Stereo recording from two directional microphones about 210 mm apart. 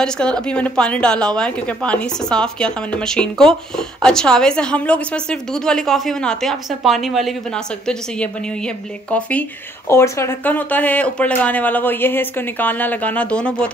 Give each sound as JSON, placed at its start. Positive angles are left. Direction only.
{"t": 0.0, "sound": "a woman's voice", "side_deg": 5}